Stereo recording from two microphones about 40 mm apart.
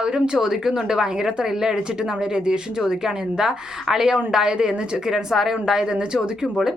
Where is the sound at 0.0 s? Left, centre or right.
Right.